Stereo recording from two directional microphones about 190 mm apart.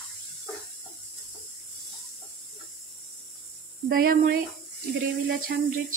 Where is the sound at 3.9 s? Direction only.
50° right (ahead or behind).